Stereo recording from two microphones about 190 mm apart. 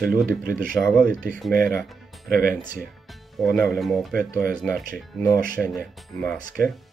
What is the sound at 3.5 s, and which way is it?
Speech, centre (ahead or behind).